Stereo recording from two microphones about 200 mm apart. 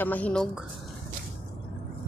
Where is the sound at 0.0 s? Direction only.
10° left (ahead or behind).